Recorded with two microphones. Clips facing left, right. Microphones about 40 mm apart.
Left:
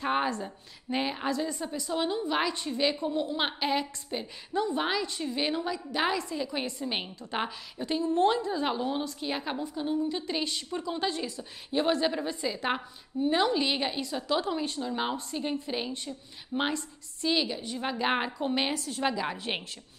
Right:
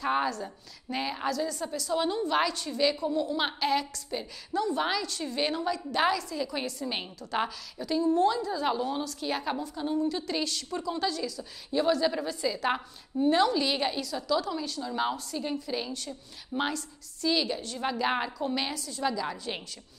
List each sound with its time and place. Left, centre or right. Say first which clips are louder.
0.0 s a woman's voice: even; left
2.5 s a woman's voice: right 1 dB; left
6.1 s a woman's voice: even; left
7.8 s a woman's voice: right 1 dB; left
12.1 s a woman's voice: right 1 dB; centre
14.0 s a woman's voice: even; left
14.9 s a woman's voice: right 1 dB; centre; by 19.6 s left